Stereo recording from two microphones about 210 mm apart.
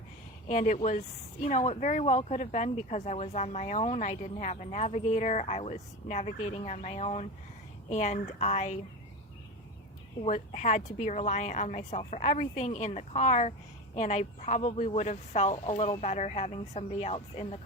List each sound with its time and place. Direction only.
0.4 s speech: 35° left (ahead or behind)
10.2 s speech: 35° left (ahead or behind)